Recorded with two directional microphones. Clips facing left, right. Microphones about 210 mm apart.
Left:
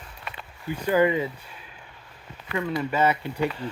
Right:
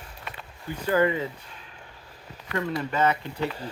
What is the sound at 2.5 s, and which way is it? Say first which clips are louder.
Speech: left 2 dB; 10° left (ahead or behind).